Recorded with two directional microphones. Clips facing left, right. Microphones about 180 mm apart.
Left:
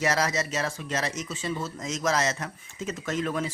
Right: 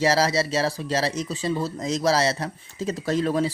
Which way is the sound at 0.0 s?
30° right (ahead or behind).